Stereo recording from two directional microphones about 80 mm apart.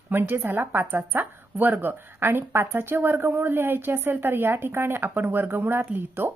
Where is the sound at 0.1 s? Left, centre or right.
Right.